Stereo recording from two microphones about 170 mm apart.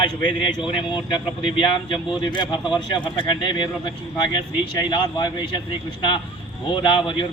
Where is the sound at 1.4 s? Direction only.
30° left (ahead or behind).